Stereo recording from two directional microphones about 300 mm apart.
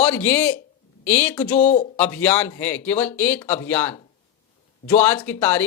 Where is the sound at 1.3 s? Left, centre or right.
Left.